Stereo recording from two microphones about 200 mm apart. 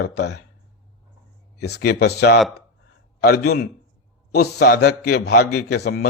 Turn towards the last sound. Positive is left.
turn(degrees=55)  # may be behind; listen again after turning